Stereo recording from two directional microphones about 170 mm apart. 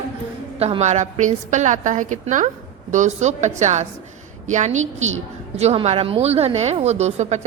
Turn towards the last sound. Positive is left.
turn(degrees=-40)  # may be behind; listen again after turning